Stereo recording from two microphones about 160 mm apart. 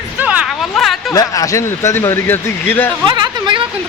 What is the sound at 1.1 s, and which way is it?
A man's voice, 20° left (ahead or behind).